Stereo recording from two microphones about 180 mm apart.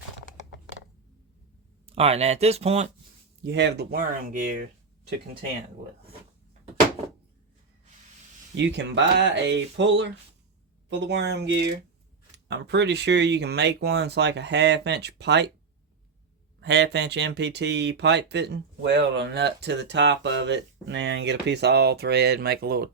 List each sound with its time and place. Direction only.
1.9 s speech: 35° right (ahead or behind)
3.4 s speech: 75° right (ahead or behind)
3.9 s speech: 50° right (ahead or behind)
8.5 s speech: 75° right (ahead or behind)
16.6 s speech: 70° right (ahead or behind)